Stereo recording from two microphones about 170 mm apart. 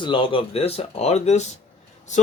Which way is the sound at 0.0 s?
30° left (ahead or behind).